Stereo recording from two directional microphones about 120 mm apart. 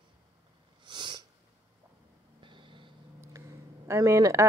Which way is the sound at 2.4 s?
45° right (ahead or behind).